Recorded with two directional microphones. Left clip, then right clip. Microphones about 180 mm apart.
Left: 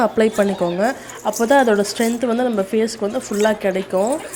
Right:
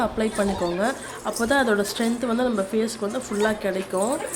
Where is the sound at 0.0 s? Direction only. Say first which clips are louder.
Left 8 dB; 30° left (ahead or behind).